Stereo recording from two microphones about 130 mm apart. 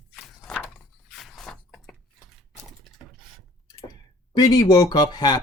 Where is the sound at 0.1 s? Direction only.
5° left (ahead or behind).